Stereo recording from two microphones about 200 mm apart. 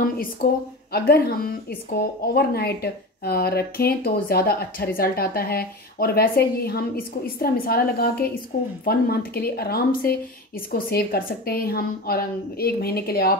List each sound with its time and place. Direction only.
0.9 s speech: 50° left (ahead or behind)